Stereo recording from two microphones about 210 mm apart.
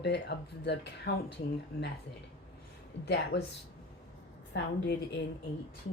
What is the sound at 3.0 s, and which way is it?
Speech, 55° left (ahead or behind).